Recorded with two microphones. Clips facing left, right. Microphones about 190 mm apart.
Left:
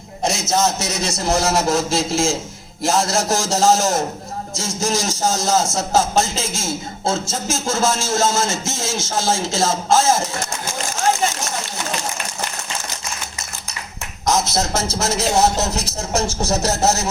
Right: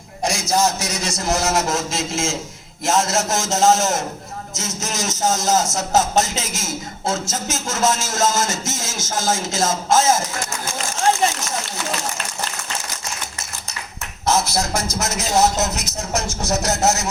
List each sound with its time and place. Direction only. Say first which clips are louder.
0.3 s a man's voice: even; 25° left (ahead or behind)
14.3 s speech: left 1 dB; 20° left (ahead or behind)